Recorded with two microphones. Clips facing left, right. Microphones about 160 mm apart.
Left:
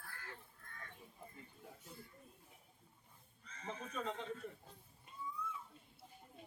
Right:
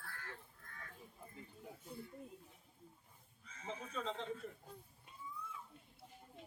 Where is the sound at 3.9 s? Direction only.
10° left (ahead or behind).